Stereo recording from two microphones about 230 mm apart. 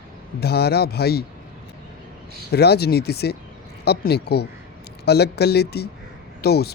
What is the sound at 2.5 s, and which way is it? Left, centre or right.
Speech, left.